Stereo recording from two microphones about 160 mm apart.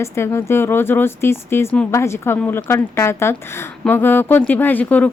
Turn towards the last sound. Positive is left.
turn(degrees=10)  # may be behind; listen again after turning